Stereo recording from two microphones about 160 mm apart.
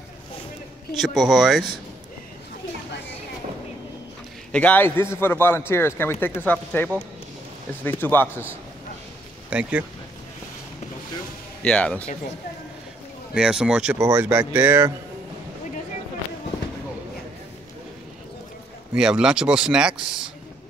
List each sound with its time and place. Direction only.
0.9 s speech: centre (ahead or behind)
2.9 s a sound: 90° left
4.5 s speech: 10° left (ahead or behind)
9.5 s speech: 10° right (ahead or behind)
11.6 s speech: 5° left (ahead or behind)
13.3 s speech: 5° right (ahead or behind)
13.9 s speech: 25° right (ahead or behind)
14.2 s speech: 10° right (ahead or behind)
18.9 s speech: 5° right (ahead or behind)